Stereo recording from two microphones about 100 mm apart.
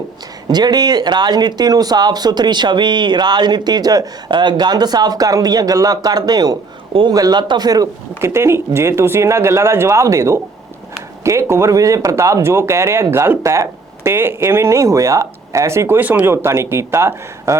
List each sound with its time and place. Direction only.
0.4 s a man's voice: 45° right (ahead or behind)
8.2 s speech: 25° right (ahead or behind)
16.0 s speech: 15° right (ahead or behind)